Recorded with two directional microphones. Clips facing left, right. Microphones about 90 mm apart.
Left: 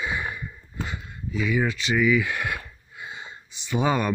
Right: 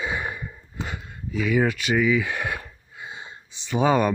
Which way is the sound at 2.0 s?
30° right (ahead or behind).